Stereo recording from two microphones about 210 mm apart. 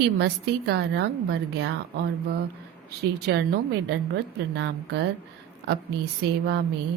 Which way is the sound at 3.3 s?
55° right (ahead or behind).